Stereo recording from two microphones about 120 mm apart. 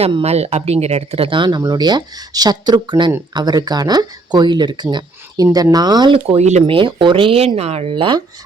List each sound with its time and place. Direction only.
0.0 s speech: 55° right (ahead or behind); by 6.1 s 35° right (ahead or behind)
6.1 s speech: 65° right (ahead or behind)
6.7 s speech: 45° right (ahead or behind)